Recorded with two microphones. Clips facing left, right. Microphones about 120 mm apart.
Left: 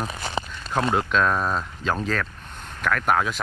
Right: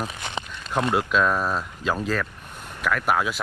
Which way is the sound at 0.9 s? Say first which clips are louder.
Right 1 dB; 5° right (ahead or behind).